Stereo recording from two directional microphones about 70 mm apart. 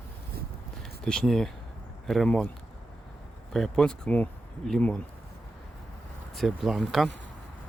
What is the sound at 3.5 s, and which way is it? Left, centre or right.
Speech, centre.